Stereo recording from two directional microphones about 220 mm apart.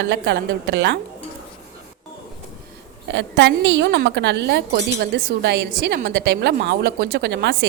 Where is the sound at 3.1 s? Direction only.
55° right (ahead or behind).